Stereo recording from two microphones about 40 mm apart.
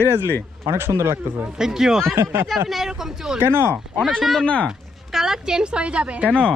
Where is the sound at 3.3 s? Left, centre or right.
Right.